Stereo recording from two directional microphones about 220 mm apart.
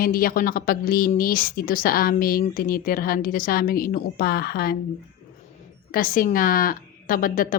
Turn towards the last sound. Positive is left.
turn(degrees=40)  # may be behind; listen again after turning